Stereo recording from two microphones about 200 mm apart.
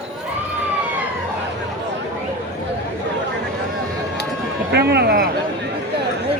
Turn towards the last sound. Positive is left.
turn(degrees=-55)  # may be behind; listen again after turning